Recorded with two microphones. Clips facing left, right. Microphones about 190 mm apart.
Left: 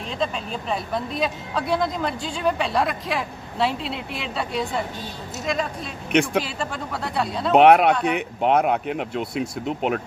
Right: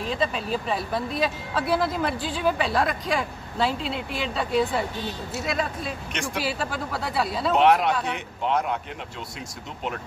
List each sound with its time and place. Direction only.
0.0 s speech: 5° right (ahead or behind)
7.5 s speech: 60° left (ahead or behind)